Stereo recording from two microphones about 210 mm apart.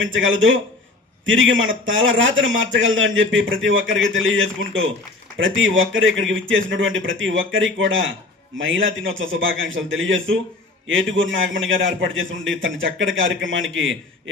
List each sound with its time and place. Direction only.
0.0 s a man's voice: 65° right (ahead or behind)